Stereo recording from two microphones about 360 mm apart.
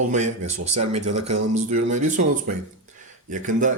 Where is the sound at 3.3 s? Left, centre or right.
Right.